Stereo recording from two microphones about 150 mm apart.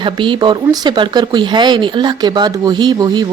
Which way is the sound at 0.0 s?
35° right (ahead or behind).